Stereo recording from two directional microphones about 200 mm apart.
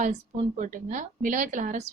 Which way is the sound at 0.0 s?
40° right (ahead or behind).